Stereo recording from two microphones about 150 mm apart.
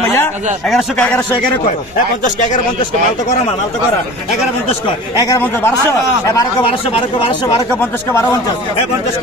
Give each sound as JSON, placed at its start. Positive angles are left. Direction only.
{"t": 4.6, "sound": "a man's voice", "side_deg": 30}
{"t": 5.4, "sound": "a man's voice", "side_deg": 15}
{"t": 6.6, "sound": "speech", "side_deg": 40}
{"t": 8.1, "sound": "a man's voice", "side_deg": 20}